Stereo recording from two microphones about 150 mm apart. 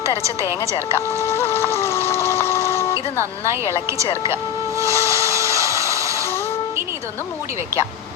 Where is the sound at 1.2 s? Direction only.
20° left (ahead or behind).